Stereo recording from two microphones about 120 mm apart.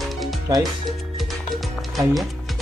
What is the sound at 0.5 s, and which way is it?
Speech, 25° right (ahead or behind).